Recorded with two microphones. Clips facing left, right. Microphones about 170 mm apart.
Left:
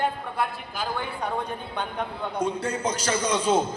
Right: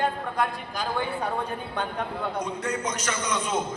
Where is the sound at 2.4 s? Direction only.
30° left (ahead or behind).